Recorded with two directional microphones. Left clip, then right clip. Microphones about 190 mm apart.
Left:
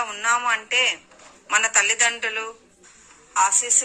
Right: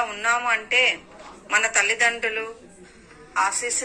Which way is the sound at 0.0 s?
55° left (ahead or behind).